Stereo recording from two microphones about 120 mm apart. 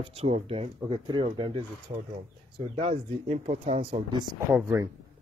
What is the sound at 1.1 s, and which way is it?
Speech, 40° right (ahead or behind).